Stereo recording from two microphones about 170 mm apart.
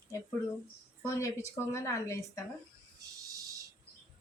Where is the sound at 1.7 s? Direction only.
15° left (ahead or behind).